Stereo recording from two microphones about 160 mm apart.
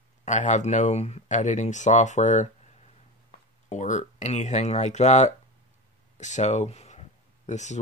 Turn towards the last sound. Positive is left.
turn(degrees=45)  # may be behind; listen again after turning